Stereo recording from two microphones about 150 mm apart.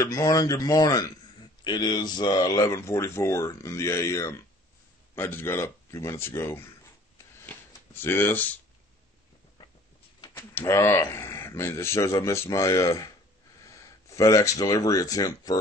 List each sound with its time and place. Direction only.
0.0 s a man's voice: 20° left (ahead or behind)
7.4 s shuffling cards: 15° left (ahead or behind)
10.2 s speech: 20° left (ahead or behind)